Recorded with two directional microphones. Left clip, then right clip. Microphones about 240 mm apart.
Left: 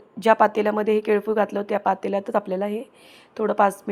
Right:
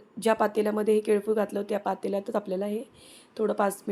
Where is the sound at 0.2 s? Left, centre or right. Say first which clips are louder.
Left 7 dB; centre.